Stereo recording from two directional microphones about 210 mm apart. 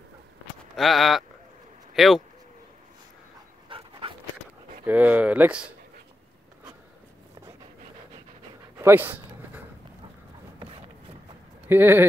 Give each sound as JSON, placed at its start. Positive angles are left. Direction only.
{"t": 0.7, "sound": "speech", "side_deg": 0}
{"t": 3.6, "sound": "dog", "side_deg": -25}
{"t": 4.8, "sound": "speech", "side_deg": -5}
{"t": 8.7, "sound": "speech", "side_deg": -10}
{"t": 11.7, "sound": "speech", "side_deg": -10}